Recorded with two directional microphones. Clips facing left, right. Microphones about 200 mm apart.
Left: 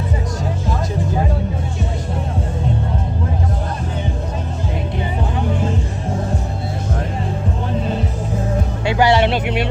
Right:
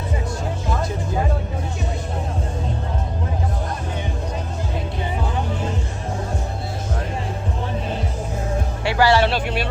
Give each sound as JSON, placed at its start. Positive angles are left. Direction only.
{"t": 8.8, "sound": "speech", "side_deg": 20}